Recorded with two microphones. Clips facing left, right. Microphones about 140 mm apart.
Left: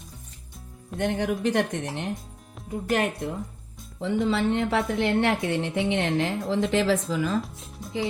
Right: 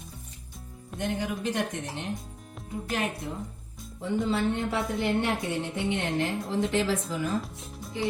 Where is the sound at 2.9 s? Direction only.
60° left (ahead or behind).